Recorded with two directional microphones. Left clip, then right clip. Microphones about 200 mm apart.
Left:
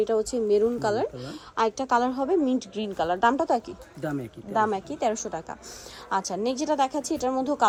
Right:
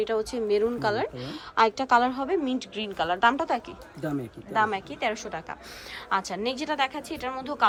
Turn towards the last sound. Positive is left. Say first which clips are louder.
# left 6 dB
turn(degrees=30)  # may be behind; listen again after turning